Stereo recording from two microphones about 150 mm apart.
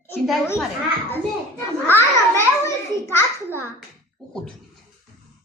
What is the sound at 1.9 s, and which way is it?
A child's voice, 20° left (ahead or behind).